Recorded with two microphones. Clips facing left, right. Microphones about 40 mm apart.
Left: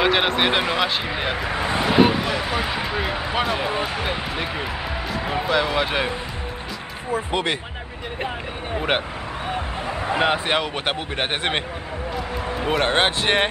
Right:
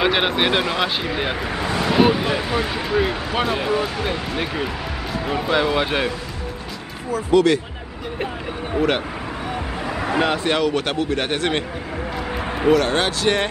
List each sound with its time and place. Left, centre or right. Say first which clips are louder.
0.0 s speech: even; centre
1.5 s speech: left 2 dB; centre
2.0 s speech: right 1 dB; centre
3.8 s speech: right 1 dB; centre
5.5 s speech: right 2 dB; centre
7.1 s speech: right 7 dB; left
9.9 s speech: even; centre
12.6 s speech: right 3 dB; left